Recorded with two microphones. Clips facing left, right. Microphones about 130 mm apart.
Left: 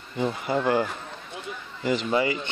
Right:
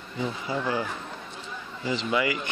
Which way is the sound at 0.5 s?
55° left (ahead or behind).